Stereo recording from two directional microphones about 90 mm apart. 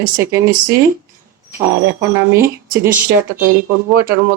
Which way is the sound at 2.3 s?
25° right (ahead or behind).